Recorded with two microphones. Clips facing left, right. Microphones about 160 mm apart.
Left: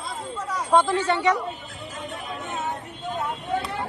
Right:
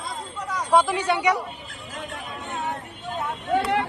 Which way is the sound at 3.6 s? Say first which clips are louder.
Right 7 dB; 75° right (ahead or behind).